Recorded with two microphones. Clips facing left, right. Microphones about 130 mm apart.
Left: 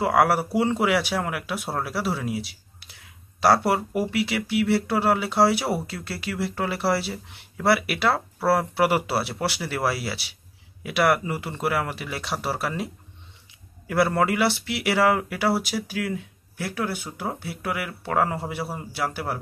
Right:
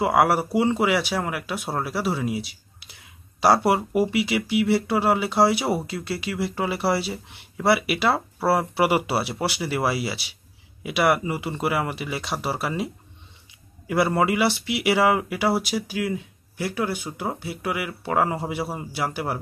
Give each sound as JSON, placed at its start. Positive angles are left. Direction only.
{"t": 0.0, "sound": "speech", "side_deg": -5}
{"t": 3.6, "sound": "speech", "side_deg": -10}